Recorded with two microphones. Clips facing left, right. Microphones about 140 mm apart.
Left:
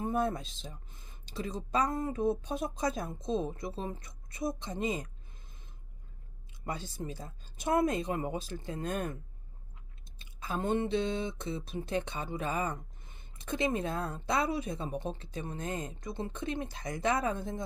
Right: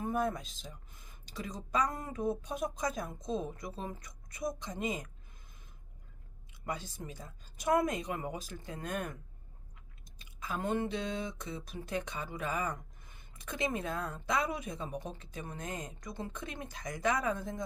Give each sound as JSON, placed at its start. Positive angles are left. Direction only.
{"t": 0.0, "sound": "speech", "side_deg": 30}
{"t": 6.5, "sound": "speech", "side_deg": 30}
{"t": 10.2, "sound": "speech", "side_deg": 30}